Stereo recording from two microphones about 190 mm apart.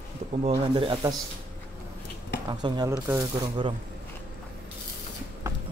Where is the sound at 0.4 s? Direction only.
30° right (ahead or behind).